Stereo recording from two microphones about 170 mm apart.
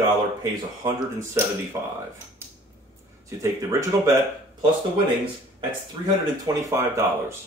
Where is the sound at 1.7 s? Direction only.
15° right (ahead or behind).